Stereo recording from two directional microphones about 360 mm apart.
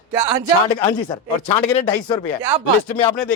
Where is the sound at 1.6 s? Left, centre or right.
Centre.